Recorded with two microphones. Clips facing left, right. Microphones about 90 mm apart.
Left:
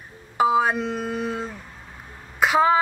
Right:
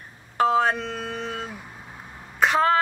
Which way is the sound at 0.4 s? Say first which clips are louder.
Left 1 dB; 5° left (ahead or behind).